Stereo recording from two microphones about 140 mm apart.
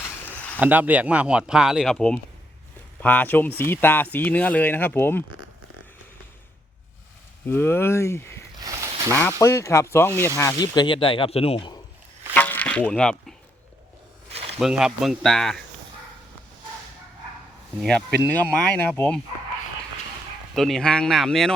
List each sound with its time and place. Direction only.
0.6 s speech: 10° right (ahead or behind); by 5.2 s 15° left (ahead or behind)
7.4 s speech: 15° left (ahead or behind)
8.6 s a sound: 20° right (ahead or behind)
9.4 s speech: 20° left (ahead or behind)
10.8 s speech: 35° left (ahead or behind)
12.3 s a sound: 10° left (ahead or behind)
14.6 s speech: 5° right (ahead or behind)
17.7 s speech: 5° left (ahead or behind)
20.6 s speech: centre (ahead or behind)